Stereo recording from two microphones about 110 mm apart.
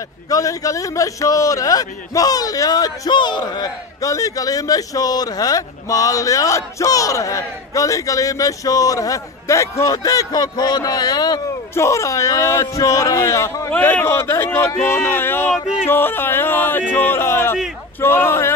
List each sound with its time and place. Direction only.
0.3 s a man's voice: 30° left (ahead or behind)
11.7 s speech: 25° left (ahead or behind)
13.7 s speech: 15° left (ahead or behind)
15.5 s yodeling: 5° right (ahead or behind)
15.9 s speech: 20° left (ahead or behind)